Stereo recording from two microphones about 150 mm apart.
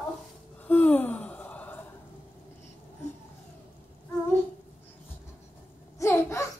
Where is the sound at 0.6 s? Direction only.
10° left (ahead or behind).